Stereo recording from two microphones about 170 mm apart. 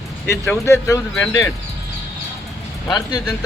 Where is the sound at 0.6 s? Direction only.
15° left (ahead or behind).